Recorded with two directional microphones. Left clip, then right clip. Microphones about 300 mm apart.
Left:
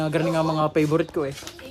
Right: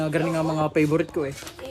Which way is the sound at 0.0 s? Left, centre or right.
Centre.